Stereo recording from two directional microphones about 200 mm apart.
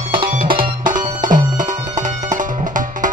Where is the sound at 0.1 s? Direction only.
50° right (ahead or behind).